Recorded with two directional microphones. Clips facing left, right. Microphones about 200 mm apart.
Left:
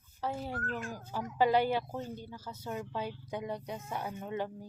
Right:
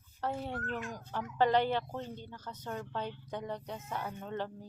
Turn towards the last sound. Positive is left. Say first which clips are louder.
# left 2 dB
turn(degrees=10)  # may be behind; listen again after turning